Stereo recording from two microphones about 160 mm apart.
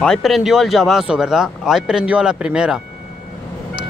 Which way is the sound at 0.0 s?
Centre (ahead or behind).